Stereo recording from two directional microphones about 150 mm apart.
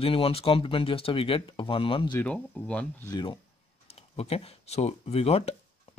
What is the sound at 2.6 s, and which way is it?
Speech, 10° left (ahead or behind).